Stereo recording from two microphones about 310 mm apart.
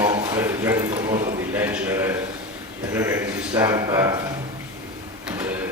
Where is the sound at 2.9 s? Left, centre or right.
Centre.